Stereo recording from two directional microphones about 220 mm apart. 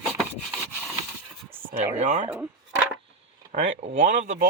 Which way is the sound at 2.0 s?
35° right (ahead or behind).